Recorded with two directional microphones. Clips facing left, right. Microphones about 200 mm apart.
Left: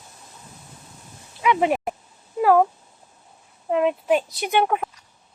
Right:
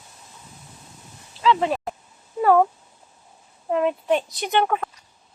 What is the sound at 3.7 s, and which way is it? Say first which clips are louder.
Speech: left 1 dB; centre (ahead or behind).